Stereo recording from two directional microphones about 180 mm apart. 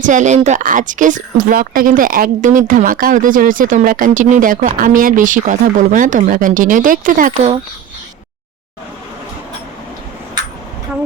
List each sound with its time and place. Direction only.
0.0 s speech: 45° right (ahead or behind)